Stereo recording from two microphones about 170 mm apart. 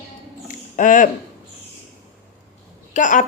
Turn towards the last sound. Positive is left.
turn(degrees=45)  # may be behind; listen again after turning